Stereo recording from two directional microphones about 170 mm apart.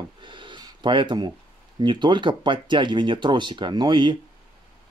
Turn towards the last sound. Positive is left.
turn(degrees=-25)  # may be behind; listen again after turning